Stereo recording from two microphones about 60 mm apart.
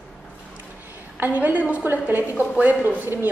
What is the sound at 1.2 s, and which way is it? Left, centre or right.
A woman's voice, right.